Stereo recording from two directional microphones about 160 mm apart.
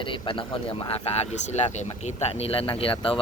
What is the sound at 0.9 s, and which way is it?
Speech, 40° left (ahead or behind).